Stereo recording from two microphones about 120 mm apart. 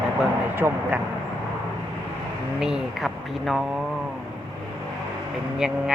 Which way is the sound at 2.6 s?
5° right (ahead or behind).